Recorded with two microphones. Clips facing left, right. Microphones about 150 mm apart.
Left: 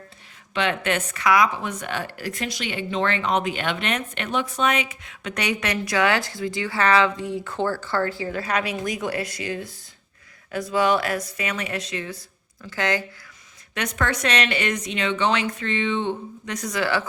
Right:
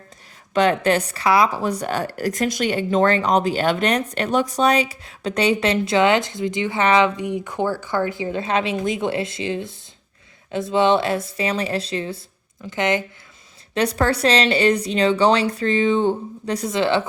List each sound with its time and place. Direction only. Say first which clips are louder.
0.5 s speech: right 7 dB; 40° right (ahead or behind); by 13.1 s 20° right (ahead or behind)
13.7 s speech: right 6 dB; 35° right (ahead or behind)